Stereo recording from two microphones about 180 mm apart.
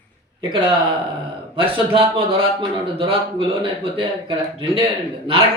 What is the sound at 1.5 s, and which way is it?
A man's voice, 30° right (ahead or behind).